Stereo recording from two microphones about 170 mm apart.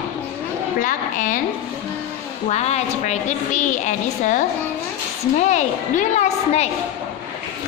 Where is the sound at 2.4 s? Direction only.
40° left (ahead or behind).